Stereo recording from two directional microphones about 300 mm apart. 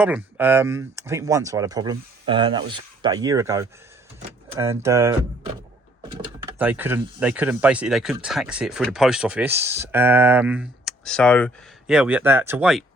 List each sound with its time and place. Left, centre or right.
0.0 s speech: centre
6.6 s speech: centre